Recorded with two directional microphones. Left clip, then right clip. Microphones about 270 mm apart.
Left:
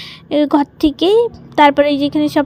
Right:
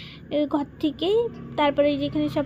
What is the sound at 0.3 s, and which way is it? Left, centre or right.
A woman's voice, left.